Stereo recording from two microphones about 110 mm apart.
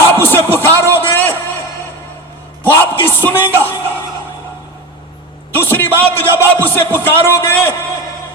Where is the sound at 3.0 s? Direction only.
20° left (ahead or behind).